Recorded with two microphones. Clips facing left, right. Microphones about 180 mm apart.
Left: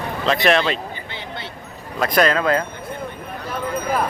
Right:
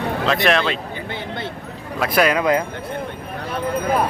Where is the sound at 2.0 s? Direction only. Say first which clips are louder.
Even; 5° right (ahead or behind).